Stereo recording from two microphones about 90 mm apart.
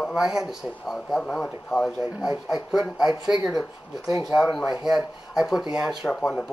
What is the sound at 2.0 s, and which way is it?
Speech, 10° right (ahead or behind).